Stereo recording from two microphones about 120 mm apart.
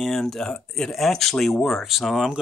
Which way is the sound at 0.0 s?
Centre (ahead or behind).